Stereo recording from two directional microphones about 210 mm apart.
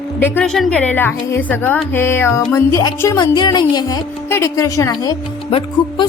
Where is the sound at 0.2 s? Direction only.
10° left (ahead or behind).